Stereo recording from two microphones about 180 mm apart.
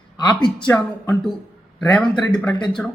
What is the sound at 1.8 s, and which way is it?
A man's voice, 5° left (ahead or behind).